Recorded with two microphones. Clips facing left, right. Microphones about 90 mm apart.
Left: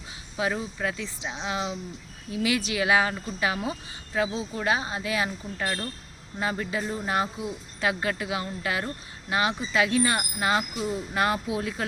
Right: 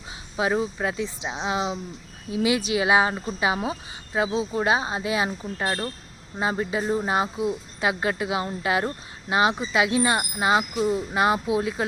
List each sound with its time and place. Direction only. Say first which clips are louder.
0.3 s speech: right 5 dB; 25° right (ahead or behind)